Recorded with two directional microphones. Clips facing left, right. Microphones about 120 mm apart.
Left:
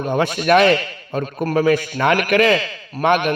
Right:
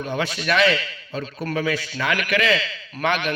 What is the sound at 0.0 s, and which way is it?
A man's voice, 50° left (ahead or behind).